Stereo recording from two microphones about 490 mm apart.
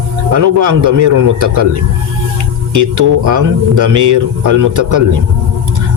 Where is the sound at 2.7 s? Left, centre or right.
Right.